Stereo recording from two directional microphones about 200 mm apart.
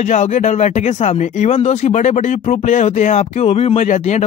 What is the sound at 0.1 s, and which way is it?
Speech, 35° left (ahead or behind).